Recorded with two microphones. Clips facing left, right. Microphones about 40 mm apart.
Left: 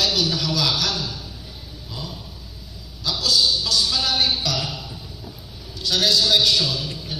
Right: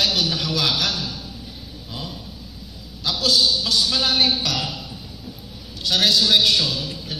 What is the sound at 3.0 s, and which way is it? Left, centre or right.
A man's voice, right.